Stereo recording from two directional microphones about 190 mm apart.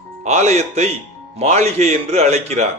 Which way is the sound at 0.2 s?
35° right (ahead or behind).